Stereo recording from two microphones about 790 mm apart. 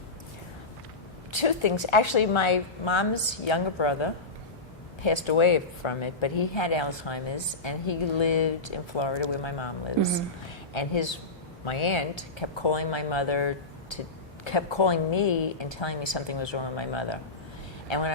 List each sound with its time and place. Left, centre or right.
1.3 s speech: left